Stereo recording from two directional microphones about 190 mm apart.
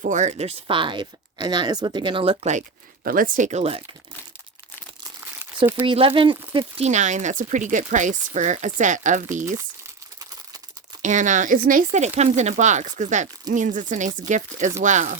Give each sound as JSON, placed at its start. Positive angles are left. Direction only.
{"t": 0.0, "sound": "speech", "side_deg": -40}
{"t": 3.0, "sound": "speech", "side_deg": -50}
{"t": 5.8, "sound": "speech", "side_deg": -30}
{"t": 9.6, "sound": "crumpling", "side_deg": -15}
{"t": 11.0, "sound": "speech", "side_deg": -40}